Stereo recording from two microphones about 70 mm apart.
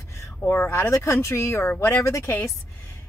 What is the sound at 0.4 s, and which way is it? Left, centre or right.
Speech, left.